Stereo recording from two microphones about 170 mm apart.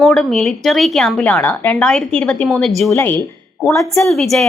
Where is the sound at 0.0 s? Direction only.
Centre (ahead or behind).